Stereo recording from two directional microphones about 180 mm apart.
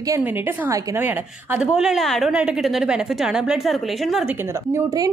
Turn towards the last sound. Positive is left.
turn(degrees=0)  # may be behind; listen again after turning